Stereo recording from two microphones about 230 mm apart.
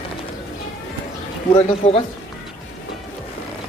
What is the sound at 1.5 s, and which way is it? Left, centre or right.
Speech, left.